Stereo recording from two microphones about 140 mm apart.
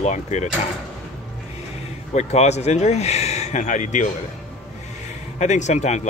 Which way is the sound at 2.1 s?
55° left (ahead or behind).